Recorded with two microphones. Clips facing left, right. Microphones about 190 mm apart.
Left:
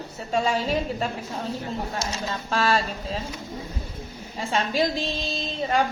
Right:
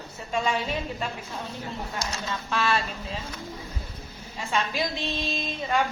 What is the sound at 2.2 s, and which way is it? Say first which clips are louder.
Speech: left 3 dB; 35° left (ahead or behind).